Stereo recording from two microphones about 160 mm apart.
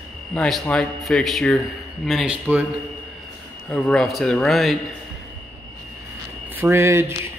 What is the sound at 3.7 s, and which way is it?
Speech, 5° left (ahead or behind).